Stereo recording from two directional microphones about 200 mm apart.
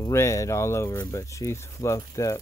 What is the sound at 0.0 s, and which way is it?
Speech, 15° left (ahead or behind).